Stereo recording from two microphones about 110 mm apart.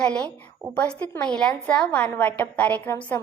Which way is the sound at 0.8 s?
15° left (ahead or behind).